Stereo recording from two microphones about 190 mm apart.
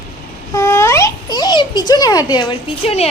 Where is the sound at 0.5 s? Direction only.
15° left (ahead or behind).